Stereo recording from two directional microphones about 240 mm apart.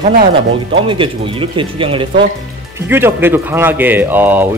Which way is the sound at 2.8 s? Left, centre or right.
Centre.